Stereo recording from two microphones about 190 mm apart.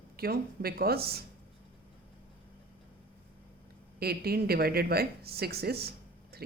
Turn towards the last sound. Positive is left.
turn(degrees=-55)  # may be behind; listen again after turning